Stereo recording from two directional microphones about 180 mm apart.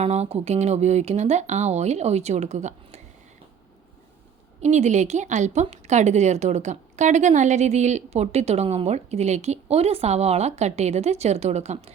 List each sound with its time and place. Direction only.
0.0 s a woman's voice: 35° right (ahead or behind)
4.6 s a woman's voice: 40° right (ahead or behind)